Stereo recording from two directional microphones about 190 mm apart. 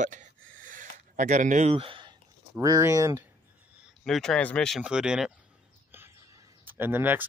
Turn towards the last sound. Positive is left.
turn(degrees=-10)  # may be behind; listen again after turning